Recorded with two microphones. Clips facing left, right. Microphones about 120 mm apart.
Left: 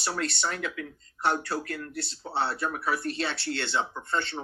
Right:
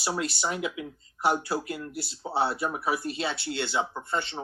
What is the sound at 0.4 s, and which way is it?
Speech, 15° right (ahead or behind).